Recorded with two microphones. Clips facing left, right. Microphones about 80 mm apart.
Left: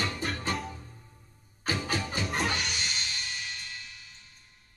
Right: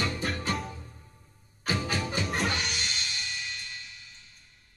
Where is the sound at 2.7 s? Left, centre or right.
Left.